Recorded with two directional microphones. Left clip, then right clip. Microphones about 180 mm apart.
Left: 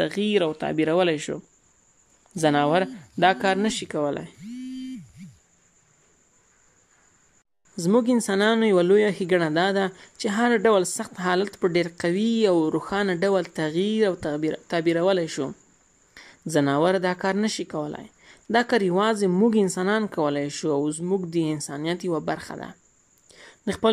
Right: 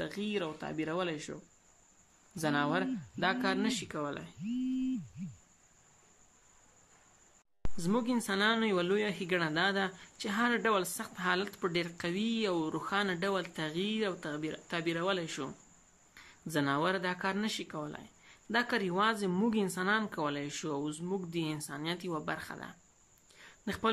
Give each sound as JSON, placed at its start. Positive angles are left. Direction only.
{"t": 0.0, "sound": "speech", "side_deg": 45}
{"t": 7.7, "sound": "speech", "side_deg": 35}
{"t": 23.2, "sound": "a sound", "side_deg": 30}